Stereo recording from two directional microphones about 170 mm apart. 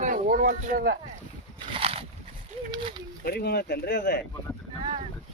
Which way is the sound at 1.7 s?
35° right (ahead or behind).